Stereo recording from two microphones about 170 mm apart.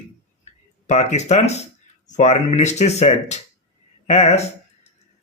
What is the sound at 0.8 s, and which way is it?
Speech, 40° left (ahead or behind).